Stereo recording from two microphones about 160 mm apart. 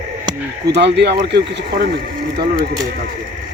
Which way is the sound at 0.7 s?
90° right.